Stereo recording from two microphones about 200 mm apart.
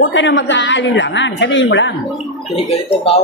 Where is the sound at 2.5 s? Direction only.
30° left (ahead or behind).